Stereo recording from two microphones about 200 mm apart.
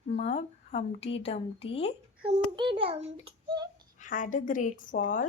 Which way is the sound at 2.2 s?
25° right (ahead or behind).